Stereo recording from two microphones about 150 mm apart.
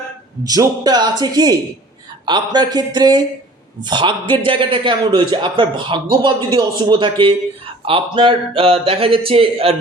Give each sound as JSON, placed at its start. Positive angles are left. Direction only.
{"t": 0.4, "sound": "a man's voice", "side_deg": -25}